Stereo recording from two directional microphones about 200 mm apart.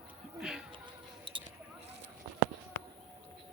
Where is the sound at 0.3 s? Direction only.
5° right (ahead or behind).